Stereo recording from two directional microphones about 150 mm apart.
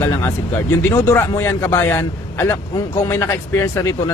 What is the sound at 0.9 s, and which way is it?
A man's voice, 15° left (ahead or behind).